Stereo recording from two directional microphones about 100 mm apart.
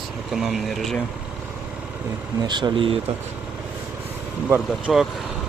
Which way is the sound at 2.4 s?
50° right (ahead or behind).